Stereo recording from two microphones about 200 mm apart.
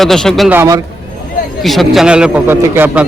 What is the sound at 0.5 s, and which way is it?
Speech, 15° right (ahead or behind).